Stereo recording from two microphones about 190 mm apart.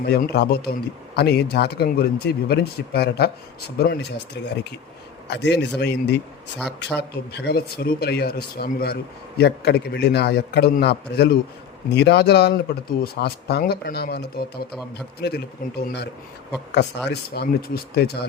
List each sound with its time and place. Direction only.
0.0 s a man's voice: 55° left (ahead or behind)
17.1 s a man's voice: 55° left (ahead or behind)